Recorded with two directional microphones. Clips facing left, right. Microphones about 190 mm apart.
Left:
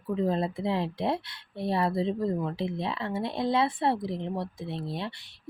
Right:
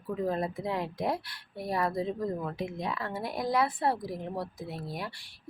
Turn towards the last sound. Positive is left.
turn(degrees=25)  # may be behind; listen again after turning